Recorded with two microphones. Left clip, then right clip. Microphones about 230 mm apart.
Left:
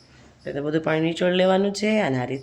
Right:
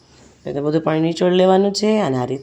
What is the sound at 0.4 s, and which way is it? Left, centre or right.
Speech, right.